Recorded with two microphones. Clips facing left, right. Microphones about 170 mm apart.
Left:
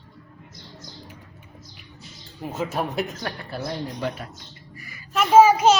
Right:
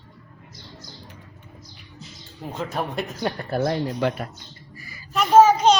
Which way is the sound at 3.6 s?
65° right (ahead or behind).